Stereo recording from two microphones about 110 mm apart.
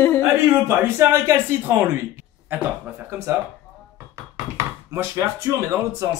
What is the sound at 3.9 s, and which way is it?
Knock, 25° right (ahead or behind).